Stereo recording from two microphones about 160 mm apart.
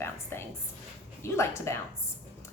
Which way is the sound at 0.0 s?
15° left (ahead or behind).